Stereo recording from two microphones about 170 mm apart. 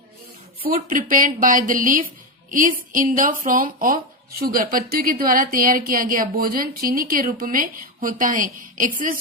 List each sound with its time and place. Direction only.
0.7 s a woman's voice: 55° right (ahead or behind)